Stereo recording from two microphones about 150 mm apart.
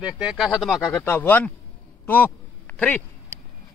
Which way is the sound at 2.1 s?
10° left (ahead or behind).